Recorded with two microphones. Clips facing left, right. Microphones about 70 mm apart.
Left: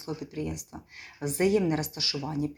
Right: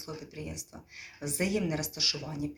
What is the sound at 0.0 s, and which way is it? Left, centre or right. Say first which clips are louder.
Speech: left 7 dB; left.